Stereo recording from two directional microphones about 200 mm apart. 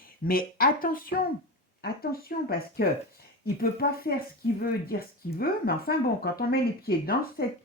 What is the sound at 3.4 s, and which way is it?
Speech, 50° left (ahead or behind).